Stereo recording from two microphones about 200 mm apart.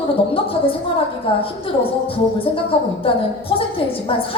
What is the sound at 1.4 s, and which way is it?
A woman's voice, 25° left (ahead or behind).